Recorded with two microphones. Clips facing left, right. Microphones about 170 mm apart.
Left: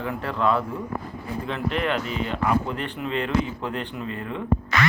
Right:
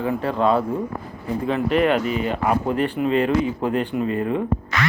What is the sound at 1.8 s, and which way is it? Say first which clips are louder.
Speech: right 6 dB; 50° right (ahead or behind).